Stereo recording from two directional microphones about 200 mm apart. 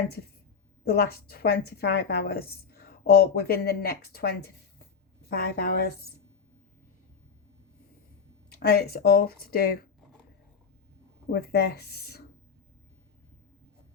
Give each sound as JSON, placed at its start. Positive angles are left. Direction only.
{"t": 0.9, "sound": "a woman's voice", "side_deg": 50}
{"t": 8.4, "sound": "a woman's voice", "side_deg": 50}
{"t": 11.3, "sound": "a woman's voice", "side_deg": 50}